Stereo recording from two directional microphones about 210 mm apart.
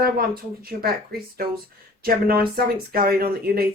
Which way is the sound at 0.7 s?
50° right (ahead or behind).